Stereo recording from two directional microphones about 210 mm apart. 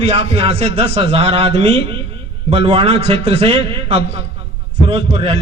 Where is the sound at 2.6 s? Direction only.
30° right (ahead or behind).